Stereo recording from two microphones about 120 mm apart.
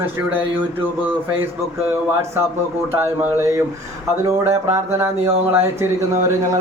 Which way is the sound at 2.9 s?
20° right (ahead or behind).